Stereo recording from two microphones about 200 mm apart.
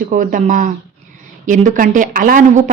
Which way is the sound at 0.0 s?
40° right (ahead or behind).